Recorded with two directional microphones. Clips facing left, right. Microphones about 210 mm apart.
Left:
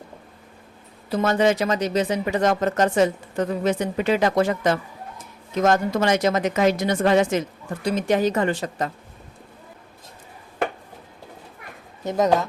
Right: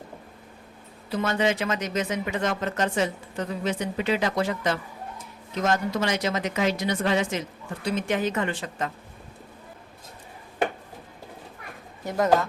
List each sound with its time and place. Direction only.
1.1 s a woman's voice: 45° left (ahead or behind)
12.0 s speech: 20° left (ahead or behind)